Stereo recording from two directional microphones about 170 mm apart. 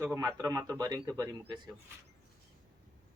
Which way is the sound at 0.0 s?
15° right (ahead or behind).